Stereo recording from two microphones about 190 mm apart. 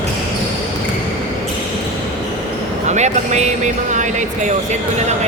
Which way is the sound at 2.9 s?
35° right (ahead or behind).